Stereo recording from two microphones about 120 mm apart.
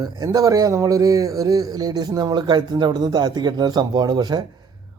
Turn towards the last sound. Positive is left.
turn(degrees=-35)  # may be behind; listen again after turning